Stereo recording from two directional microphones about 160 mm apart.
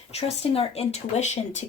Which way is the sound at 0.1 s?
40° left (ahead or behind).